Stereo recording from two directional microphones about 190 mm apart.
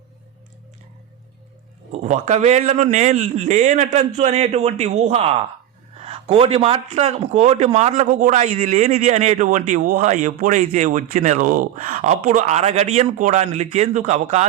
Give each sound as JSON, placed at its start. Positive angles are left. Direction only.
{"t": 2.0, "sound": "a man's voice", "side_deg": -35}